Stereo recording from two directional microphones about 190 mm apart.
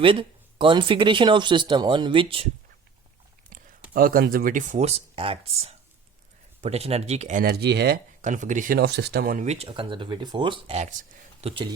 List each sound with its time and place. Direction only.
0.0 s speech: 25° right (ahead or behind)
3.5 s a sound: 45° right (ahead or behind)
3.9 s speech: 50° right (ahead or behind)
7.4 s speech: 60° right (ahead or behind)
8.2 s speech: 40° right (ahead or behind)